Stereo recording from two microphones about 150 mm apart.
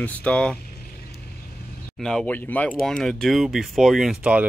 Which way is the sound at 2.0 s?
5° left (ahead or behind).